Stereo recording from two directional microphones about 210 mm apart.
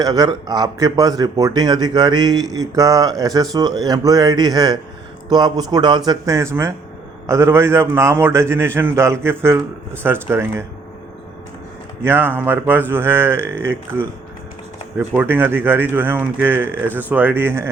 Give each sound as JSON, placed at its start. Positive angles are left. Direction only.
{"t": 0.0, "sound": "a man's voice", "side_deg": -20}
{"t": 12.0, "sound": "speech", "side_deg": -10}
{"t": 14.9, "sound": "speech", "side_deg": -10}